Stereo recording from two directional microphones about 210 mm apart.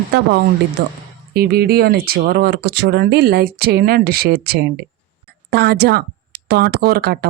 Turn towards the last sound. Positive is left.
turn(degrees=-50)  # may be behind; listen again after turning